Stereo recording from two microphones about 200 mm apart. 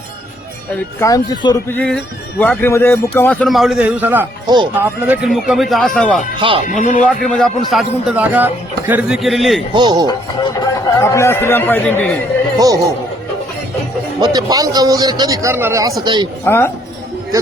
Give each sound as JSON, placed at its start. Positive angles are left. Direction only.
{"t": 0.9, "sound": "a man's voice", "side_deg": 15}
{"t": 1.7, "sound": "a man's voice", "side_deg": 5}
{"t": 4.4, "sound": "speech", "side_deg": -20}
{"t": 4.8, "sound": "a man's voice", "side_deg": -10}
{"t": 6.8, "sound": "a man's voice", "side_deg": 40}
{"t": 7.1, "sound": "a man's voice", "side_deg": 5}
{"t": 9.7, "sound": "a man's voice", "side_deg": -20}
{"t": 10.1, "sound": "a man's voice", "side_deg": 20}
{"t": 12.5, "sound": "speech", "side_deg": -20}
{"t": 14.2, "sound": "a man's voice", "side_deg": -20}
{"t": 16.4, "sound": "a man's voice", "side_deg": 10}
{"t": 17.3, "sound": "speech", "side_deg": -15}